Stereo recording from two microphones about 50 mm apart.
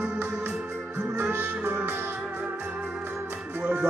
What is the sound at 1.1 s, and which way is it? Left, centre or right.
Music, right.